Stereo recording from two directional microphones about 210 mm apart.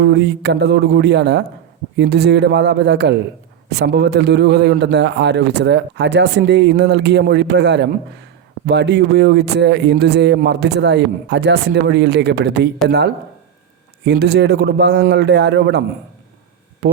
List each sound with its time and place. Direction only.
0.0 s a man's voice: 55° right (ahead or behind)
16.8 s speech: 50° right (ahead or behind)